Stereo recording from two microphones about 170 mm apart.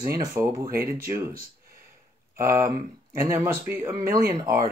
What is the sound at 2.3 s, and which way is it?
Speech, 15° right (ahead or behind).